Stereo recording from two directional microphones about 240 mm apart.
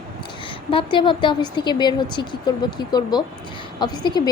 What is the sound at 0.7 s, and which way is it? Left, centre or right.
A woman's voice, left.